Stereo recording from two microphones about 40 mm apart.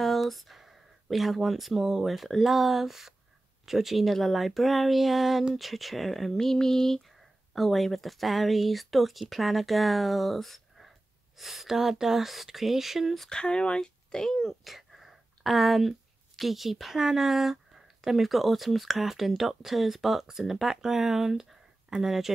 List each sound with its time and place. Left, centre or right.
0.0 s speech: centre
13.3 s speech: left
14.1 s speech: centre